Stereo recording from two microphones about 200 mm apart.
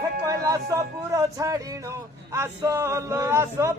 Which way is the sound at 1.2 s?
15° right (ahead or behind).